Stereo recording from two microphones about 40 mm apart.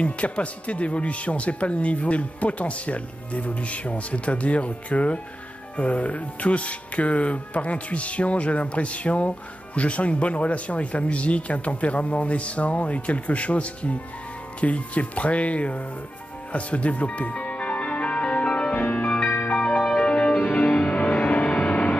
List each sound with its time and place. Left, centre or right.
0.0 s speech: left
16.5 s music: left
19.2 s music: left
19.5 s music: left
21.1 s vehicle: left